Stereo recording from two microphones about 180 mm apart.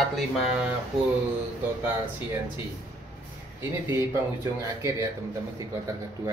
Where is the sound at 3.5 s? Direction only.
15° right (ahead or behind).